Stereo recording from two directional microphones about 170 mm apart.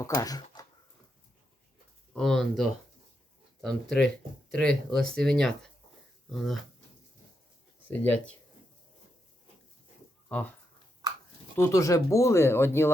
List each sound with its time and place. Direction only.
0.0 s speech: 20° left (ahead or behind)
2.1 s speech: 5° left (ahead or behind)
7.9 s speech: 10° left (ahead or behind)
10.2 s speech: 10° left (ahead or behind)
11.5 s speech: 15° left (ahead or behind)